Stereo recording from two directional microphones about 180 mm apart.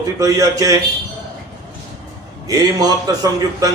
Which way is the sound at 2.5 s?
20° right (ahead or behind).